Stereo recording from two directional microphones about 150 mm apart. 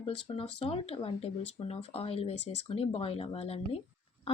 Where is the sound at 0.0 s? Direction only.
40° left (ahead or behind).